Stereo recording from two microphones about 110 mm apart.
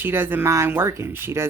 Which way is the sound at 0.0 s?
20° right (ahead or behind).